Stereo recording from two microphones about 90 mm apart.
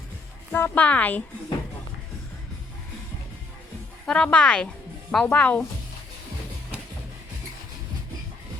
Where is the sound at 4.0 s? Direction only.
10° left (ahead or behind).